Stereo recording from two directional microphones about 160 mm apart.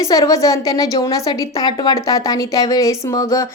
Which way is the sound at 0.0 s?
20° left (ahead or behind).